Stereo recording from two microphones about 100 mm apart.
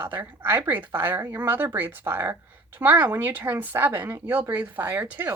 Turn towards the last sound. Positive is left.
turn(degrees=-15)  # may be behind; listen again after turning